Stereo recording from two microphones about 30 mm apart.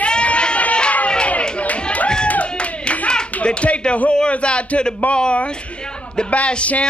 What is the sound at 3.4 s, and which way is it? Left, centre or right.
Speech, left.